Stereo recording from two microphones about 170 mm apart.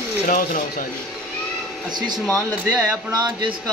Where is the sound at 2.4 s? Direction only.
20° right (ahead or behind).